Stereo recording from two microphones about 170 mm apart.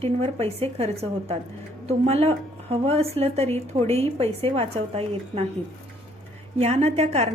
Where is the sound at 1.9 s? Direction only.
35° right (ahead or behind).